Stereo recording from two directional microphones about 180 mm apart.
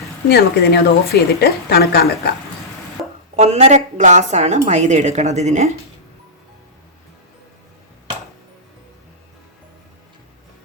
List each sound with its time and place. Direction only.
0.3 s a woman's voice: 60° left (ahead or behind)
3.3 s a woman's voice: 40° right (ahead or behind)